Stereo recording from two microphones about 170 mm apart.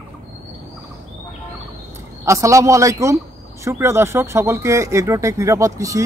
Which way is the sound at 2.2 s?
20° right (ahead or behind).